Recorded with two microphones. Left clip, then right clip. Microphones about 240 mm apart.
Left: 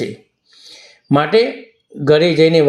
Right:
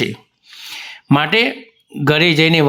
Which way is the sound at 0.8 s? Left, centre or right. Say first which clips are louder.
Left 1 dB; right.